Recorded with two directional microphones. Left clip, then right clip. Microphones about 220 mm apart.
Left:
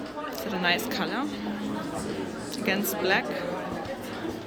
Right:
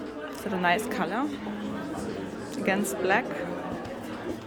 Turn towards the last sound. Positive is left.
turn(degrees=-15)  # may be behind; listen again after turning